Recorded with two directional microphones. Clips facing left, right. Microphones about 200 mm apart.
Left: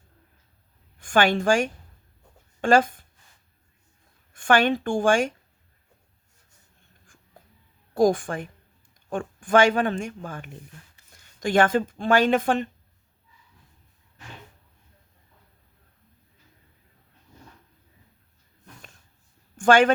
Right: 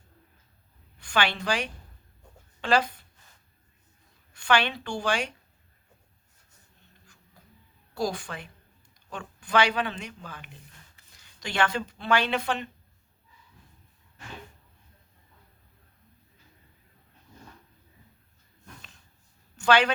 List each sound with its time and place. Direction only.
0.9 s a woman's voice: 50° left (ahead or behind)
4.4 s speech: 50° left (ahead or behind)
7.9 s speech: 50° left (ahead or behind)
19.5 s speech: 50° left (ahead or behind)